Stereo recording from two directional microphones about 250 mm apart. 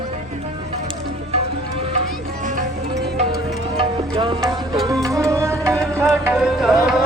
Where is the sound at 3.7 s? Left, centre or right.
Centre.